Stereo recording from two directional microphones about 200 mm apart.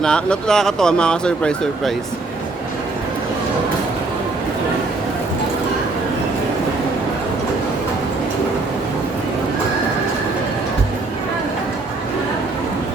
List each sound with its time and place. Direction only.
0.0 s speech: 5° left (ahead or behind)